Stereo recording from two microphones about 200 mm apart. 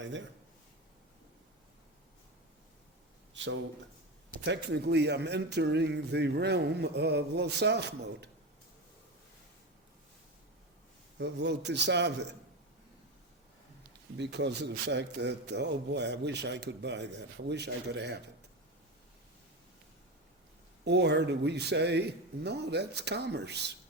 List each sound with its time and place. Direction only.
3.3 s a sound: 65° right (ahead or behind)
4.4 s a man's voice: 60° right (ahead or behind)
11.2 s a man's voice: 60° right (ahead or behind)
14.2 s a man's voice: 60° right (ahead or behind)
20.8 s a man's voice: 60° right (ahead or behind)